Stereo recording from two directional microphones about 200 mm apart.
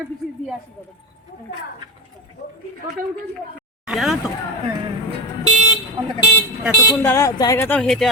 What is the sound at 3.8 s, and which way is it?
Speech, centre (ahead or behind).